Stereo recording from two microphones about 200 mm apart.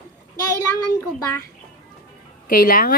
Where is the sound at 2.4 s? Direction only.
45° left (ahead or behind).